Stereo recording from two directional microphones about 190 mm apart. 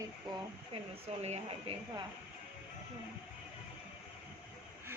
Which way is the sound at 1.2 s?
30° right (ahead or behind).